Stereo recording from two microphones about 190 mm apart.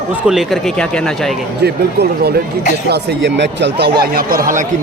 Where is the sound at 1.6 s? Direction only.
55° right (ahead or behind).